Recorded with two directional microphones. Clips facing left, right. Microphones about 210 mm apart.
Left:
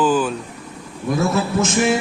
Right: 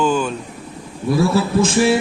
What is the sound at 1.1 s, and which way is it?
Speech, 30° right (ahead or behind).